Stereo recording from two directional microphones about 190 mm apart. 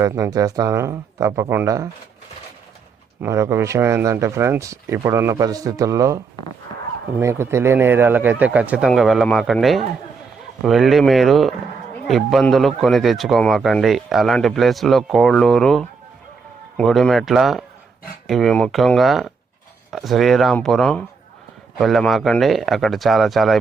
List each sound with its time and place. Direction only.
0.0 s speech: 15° right (ahead or behind)
3.2 s a man's voice: 15° right (ahead or behind)